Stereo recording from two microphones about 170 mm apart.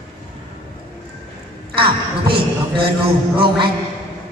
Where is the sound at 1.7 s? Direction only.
30° right (ahead or behind).